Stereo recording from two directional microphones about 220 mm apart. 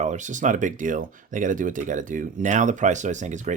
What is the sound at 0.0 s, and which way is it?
Speech, 35° right (ahead or behind).